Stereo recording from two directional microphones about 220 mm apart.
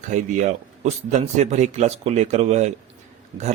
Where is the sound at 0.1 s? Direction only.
30° right (ahead or behind).